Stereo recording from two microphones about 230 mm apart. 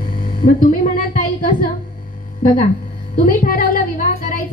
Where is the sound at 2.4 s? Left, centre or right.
Left.